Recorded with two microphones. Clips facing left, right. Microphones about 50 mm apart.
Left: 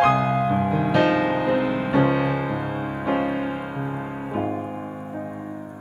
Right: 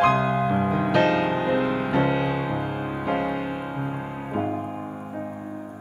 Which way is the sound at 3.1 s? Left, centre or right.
Left.